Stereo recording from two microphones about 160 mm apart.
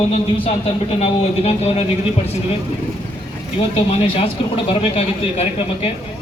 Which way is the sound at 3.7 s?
40° left (ahead or behind).